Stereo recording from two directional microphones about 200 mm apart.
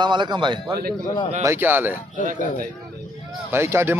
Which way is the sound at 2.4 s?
40° left (ahead or behind).